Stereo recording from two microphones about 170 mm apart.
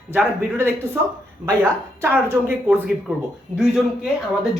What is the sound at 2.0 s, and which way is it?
A woman's voice, 10° right (ahead or behind).